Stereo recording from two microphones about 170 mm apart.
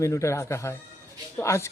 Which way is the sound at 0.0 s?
15° left (ahead or behind).